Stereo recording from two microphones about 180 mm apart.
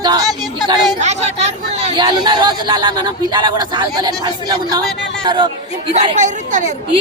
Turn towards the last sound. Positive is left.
turn(degrees=-40)  # may be behind; listen again after turning